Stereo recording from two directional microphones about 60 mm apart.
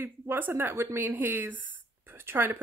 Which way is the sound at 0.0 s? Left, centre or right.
Right.